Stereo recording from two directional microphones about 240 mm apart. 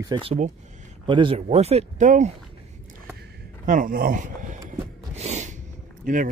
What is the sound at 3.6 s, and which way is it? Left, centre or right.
Speech, right.